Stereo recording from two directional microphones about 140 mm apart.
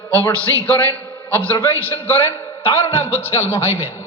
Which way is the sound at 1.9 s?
15° left (ahead or behind).